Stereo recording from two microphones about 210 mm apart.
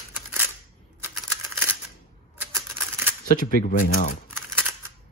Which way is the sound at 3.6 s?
35° left (ahead or behind).